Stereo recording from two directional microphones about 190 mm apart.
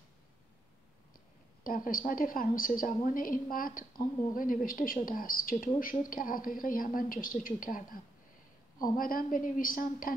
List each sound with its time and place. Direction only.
1.6 s speech: 50° left (ahead or behind)